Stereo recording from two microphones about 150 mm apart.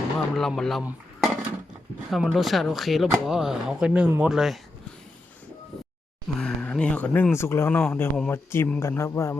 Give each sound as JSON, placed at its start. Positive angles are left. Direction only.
{"t": 0.3, "sound": "speech", "side_deg": 5}
{"t": 0.9, "sound": "dishes", "side_deg": -5}
{"t": 2.0, "sound": "speech", "side_deg": 0}
{"t": 6.2, "sound": "a sound", "side_deg": 5}
{"t": 7.3, "sound": "speech", "side_deg": 15}
{"t": 7.8, "sound": "speech", "side_deg": 5}